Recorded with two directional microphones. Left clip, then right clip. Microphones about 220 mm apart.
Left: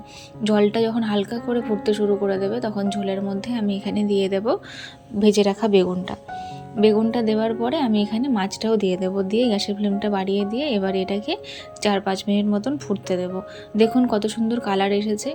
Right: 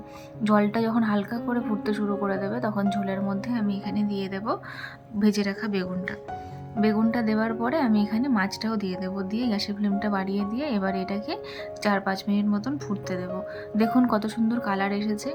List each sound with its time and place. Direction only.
0.4 s speech: 5° left (ahead or behind)
7.0 s speech: 5° left (ahead or behind)